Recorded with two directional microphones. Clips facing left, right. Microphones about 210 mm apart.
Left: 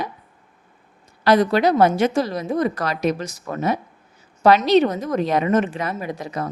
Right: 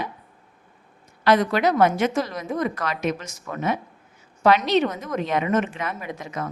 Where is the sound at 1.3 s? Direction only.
35° left (ahead or behind).